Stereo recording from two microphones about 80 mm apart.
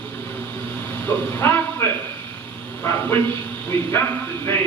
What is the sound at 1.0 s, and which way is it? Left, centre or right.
Speech, left.